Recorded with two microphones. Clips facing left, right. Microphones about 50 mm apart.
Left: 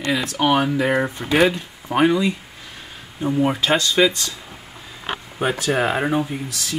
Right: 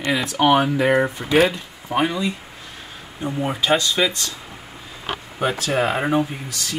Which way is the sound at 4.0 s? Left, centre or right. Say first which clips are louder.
Left 4 dB; centre.